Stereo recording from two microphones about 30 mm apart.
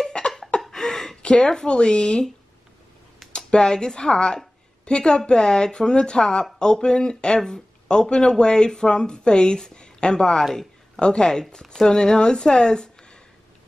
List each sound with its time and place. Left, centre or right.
0.2 s a sound: left
0.6 s a sound: centre
1.2 s speech: left
3.3 s speech: left
10.4 s speech: centre
11.0 s speech: left